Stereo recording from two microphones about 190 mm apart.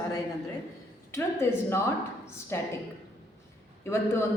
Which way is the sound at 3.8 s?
15° left (ahead or behind).